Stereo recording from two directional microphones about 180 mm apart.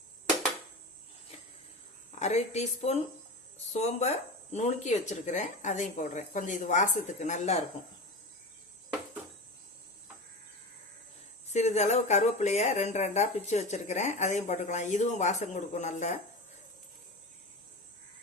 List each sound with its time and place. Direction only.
2.1 s speech: 40° left (ahead or behind)
11.5 s speech: 40° left (ahead or behind)